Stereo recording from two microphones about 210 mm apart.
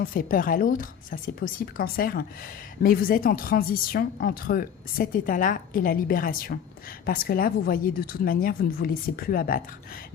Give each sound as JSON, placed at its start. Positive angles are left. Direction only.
{"t": 0.0, "sound": "speech", "side_deg": 40}